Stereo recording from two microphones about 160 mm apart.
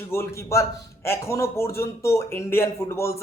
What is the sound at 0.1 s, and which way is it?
A man's voice, 15° left (ahead or behind).